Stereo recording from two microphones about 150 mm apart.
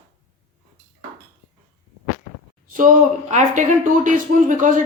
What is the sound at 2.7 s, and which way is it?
Speech, 65° right (ahead or behind).